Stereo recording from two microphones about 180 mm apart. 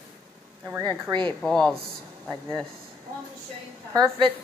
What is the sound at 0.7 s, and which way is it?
Speech, 20° right (ahead or behind).